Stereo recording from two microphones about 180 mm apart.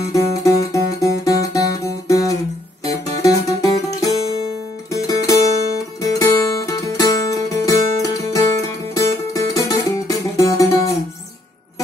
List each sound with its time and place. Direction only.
0.0 s music: 20° left (ahead or behind)